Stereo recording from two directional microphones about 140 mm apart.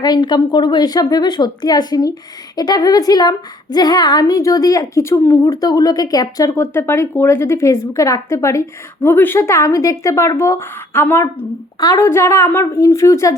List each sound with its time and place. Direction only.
0.0 s a woman's voice: 30° left (ahead or behind)